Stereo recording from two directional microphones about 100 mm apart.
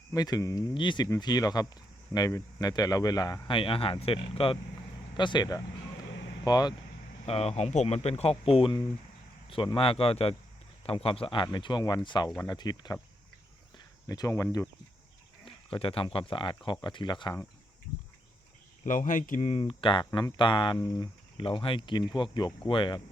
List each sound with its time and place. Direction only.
0.1 s speech: 40° left (ahead or behind)
0.7 s speech: 50° left (ahead or behind)
1.2 s speech: 40° left (ahead or behind)
3.5 s a man's voice: 65° left (ahead or behind)
5.1 s speech: 50° left (ahead or behind)
7.3 s speech: 90° left
9.7 s a man's voice: 70° left (ahead or behind)
11.5 s speech: 50° left (ahead or behind); by 14.7 s 30° left (ahead or behind)
15.4 s speech: 65° left (ahead or behind)
19.5 s a man's voice: 75° left (ahead or behind); by 20.7 s 50° left (ahead or behind)
20.7 s speech: 30° left (ahead or behind)
21.3 s speech: 65° left (ahead or behind)